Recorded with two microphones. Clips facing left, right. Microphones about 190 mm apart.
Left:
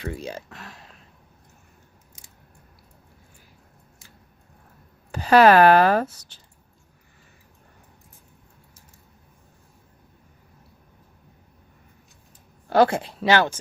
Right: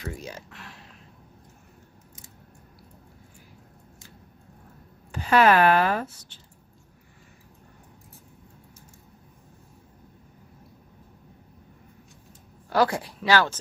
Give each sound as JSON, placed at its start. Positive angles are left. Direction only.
{"t": 0.0, "sound": "speech", "side_deg": 30}
{"t": 0.5, "sound": "a sound", "side_deg": 40}
{"t": 5.1, "sound": "speech", "side_deg": 35}
{"t": 12.7, "sound": "speech", "side_deg": 25}